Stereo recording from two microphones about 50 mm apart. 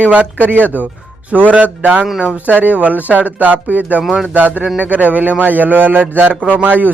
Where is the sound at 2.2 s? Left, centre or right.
Centre.